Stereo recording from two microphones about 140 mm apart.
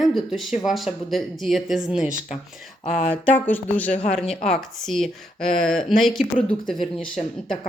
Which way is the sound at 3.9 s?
55° left (ahead or behind).